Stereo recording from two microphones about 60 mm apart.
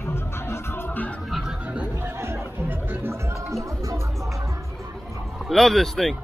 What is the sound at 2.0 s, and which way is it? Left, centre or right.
Music, right.